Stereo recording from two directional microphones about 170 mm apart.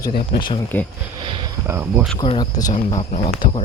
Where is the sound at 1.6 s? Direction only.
15° right (ahead or behind).